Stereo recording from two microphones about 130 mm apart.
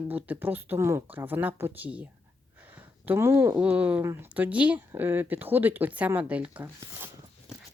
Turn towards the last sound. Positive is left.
turn(degrees=-10)  # may be behind; listen again after turning